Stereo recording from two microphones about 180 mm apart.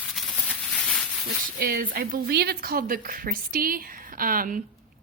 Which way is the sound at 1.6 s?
55° right (ahead or behind).